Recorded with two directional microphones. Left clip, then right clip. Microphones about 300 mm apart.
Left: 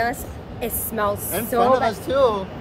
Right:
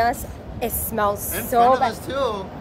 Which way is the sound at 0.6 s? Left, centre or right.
Centre.